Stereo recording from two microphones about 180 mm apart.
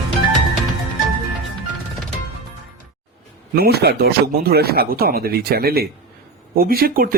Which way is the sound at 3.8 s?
60° right (ahead or behind).